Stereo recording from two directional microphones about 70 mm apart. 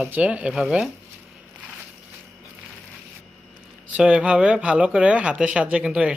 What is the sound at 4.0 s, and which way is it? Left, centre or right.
Speech, centre.